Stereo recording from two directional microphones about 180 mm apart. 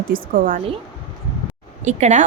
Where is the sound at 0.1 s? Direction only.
50° right (ahead or behind).